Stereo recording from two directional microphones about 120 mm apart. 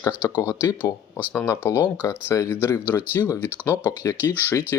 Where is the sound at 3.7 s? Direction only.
35° left (ahead or behind).